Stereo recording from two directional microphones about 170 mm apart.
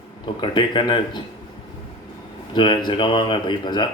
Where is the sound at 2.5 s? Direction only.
30° left (ahead or behind).